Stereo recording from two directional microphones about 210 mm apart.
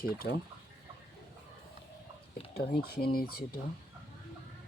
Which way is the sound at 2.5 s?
50° left (ahead or behind).